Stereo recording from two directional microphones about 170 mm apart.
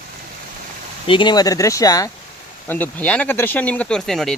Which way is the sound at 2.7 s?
10° left (ahead or behind).